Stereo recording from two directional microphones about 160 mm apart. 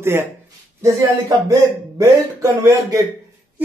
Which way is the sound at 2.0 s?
20° right (ahead or behind).